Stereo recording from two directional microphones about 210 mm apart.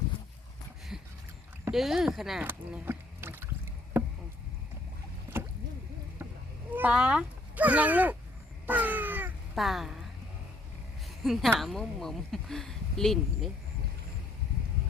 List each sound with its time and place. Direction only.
0.9 s a sound: 5° right (ahead or behind)
1.7 s speech: centre (ahead or behind)
6.7 s speech: 5° right (ahead or behind)
8.6 s cat: 10° right (ahead or behind)
11.2 s speech: centre (ahead or behind)